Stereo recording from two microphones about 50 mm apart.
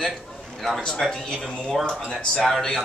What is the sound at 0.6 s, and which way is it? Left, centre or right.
Speech, centre.